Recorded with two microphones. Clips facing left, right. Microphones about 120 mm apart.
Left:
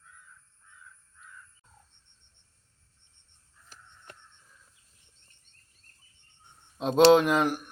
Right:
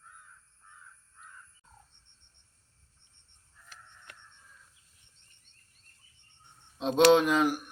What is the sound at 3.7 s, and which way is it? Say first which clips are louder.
Caw: left 2 dB; 35° left (ahead or behind).